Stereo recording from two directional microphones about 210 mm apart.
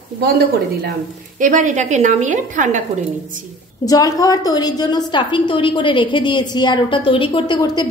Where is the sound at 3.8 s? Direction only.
15° left (ahead or behind).